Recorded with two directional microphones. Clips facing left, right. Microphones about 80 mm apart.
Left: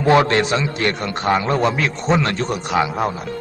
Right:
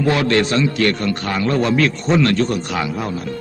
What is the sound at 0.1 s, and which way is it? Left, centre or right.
A man's voice, left.